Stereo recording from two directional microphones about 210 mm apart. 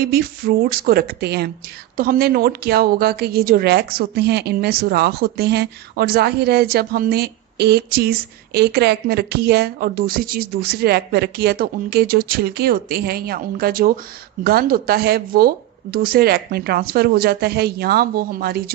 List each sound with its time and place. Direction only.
0.0 s a woman's voice: 45° right (ahead or behind)